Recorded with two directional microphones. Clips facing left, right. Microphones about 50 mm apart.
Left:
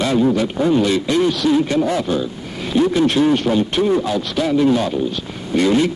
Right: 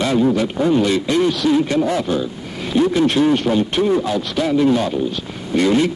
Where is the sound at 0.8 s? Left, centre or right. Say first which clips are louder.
Even; right.